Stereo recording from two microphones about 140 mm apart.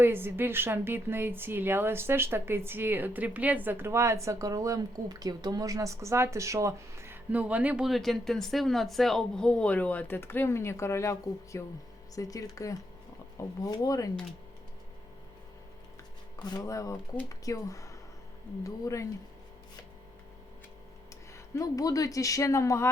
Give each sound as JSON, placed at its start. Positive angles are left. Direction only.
{"t": 0.0, "sound": "a woman's voice", "side_deg": -15}
{"t": 16.4, "sound": "speech", "side_deg": 30}
{"t": 21.3, "sound": "speech", "side_deg": 25}